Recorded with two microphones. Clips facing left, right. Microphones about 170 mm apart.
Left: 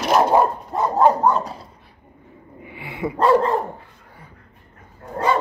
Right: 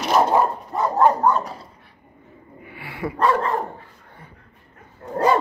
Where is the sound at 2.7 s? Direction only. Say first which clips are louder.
Left 2 dB; 20° left (ahead or behind).